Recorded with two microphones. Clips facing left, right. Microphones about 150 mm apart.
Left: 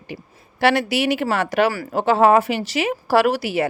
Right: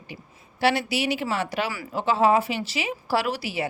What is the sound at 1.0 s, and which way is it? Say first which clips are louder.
A woman's voice: left 6 dB; 50° left (ahead or behind).